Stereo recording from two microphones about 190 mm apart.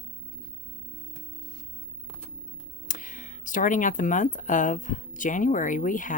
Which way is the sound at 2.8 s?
45° left (ahead or behind).